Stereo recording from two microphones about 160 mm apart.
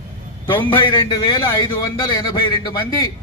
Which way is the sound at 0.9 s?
30° left (ahead or behind).